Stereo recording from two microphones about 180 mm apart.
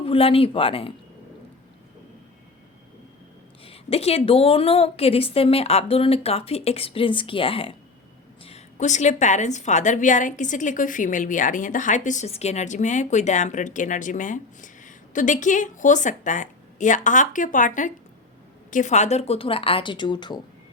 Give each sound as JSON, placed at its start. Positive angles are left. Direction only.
{"t": 0.0, "sound": "a woman's voice", "side_deg": 30}
{"t": 3.6, "sound": "a woman's voice", "side_deg": 30}